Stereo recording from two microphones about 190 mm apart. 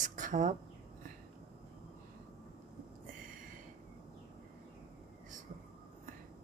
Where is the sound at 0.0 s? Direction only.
40° right (ahead or behind).